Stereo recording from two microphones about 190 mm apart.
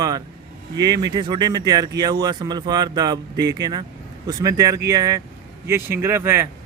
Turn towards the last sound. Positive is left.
turn(degrees=-15)  # may be behind; listen again after turning